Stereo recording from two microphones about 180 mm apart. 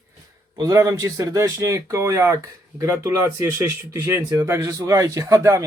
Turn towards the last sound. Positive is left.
turn(degrees=-15)  # may be behind; listen again after turning